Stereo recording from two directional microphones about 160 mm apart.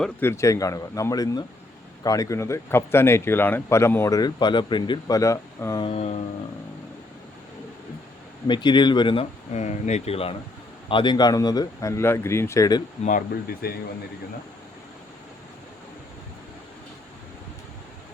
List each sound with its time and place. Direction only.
0.0 s speech: 15° left (ahead or behind)
5.8 s a sound: 40° left (ahead or behind)
8.4 s speech: 30° left (ahead or behind)
9.5 s speech: 45° left (ahead or behind); by 12.8 s 20° left (ahead or behind)
13.0 s speech: 55° left (ahead or behind)